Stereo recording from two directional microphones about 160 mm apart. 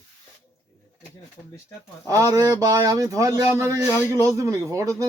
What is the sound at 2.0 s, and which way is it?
Speech, 20° right (ahead or behind).